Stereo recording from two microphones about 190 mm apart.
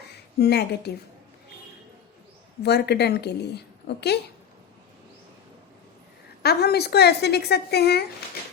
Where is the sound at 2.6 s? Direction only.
60° left (ahead or behind).